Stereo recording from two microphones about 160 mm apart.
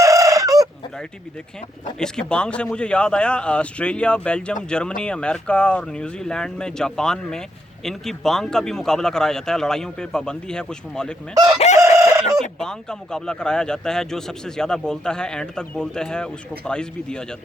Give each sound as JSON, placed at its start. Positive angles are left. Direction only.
{"t": 0.0, "sound": "chicken", "side_deg": -20}
{"t": 2.0, "sound": "a man's voice", "side_deg": 5}
{"t": 11.8, "sound": "chicken", "side_deg": -20}
{"t": 12.4, "sound": "speech", "side_deg": 5}